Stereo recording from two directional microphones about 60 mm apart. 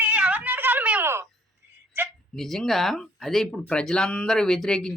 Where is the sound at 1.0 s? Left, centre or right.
Right.